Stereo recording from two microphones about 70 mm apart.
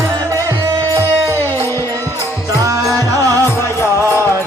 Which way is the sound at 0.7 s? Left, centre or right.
Right.